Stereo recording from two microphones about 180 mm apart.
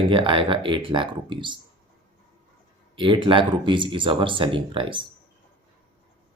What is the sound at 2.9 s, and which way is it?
Speech, 30° right (ahead or behind).